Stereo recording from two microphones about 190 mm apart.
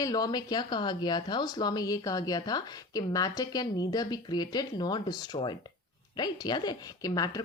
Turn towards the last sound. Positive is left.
turn(degrees=20)  # may be behind; listen again after turning